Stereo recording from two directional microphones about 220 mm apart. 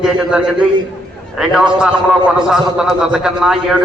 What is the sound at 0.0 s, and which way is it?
A man's voice, 5° right (ahead or behind).